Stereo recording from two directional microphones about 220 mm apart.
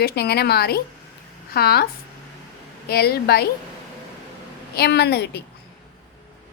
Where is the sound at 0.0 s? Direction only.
45° left (ahead or behind).